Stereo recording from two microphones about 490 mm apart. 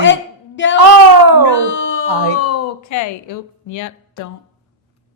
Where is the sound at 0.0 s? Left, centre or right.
Left.